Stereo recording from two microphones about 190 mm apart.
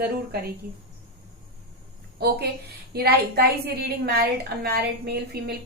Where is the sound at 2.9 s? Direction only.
55° right (ahead or behind).